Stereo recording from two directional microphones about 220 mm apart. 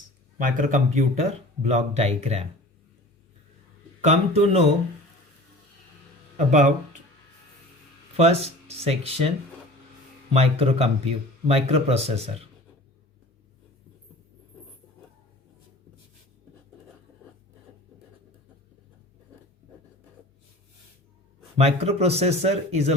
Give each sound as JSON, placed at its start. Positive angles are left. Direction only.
{"t": 0.3, "sound": "speech", "side_deg": -35}
{"t": 4.0, "sound": "speech", "side_deg": -30}
{"t": 6.3, "sound": "speech", "side_deg": -35}
{"t": 8.2, "sound": "speech", "side_deg": -30}
{"t": 10.3, "sound": "speech", "side_deg": -25}
{"t": 21.6, "sound": "speech", "side_deg": -25}